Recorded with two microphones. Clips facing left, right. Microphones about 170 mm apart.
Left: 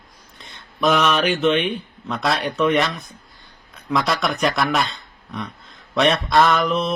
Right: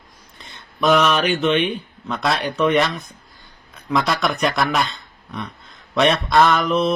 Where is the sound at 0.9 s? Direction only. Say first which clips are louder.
Right 1 dB; 40° right (ahead or behind).